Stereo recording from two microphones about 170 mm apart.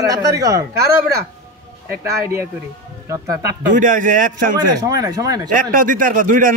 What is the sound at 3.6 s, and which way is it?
Speech, 50° right (ahead or behind).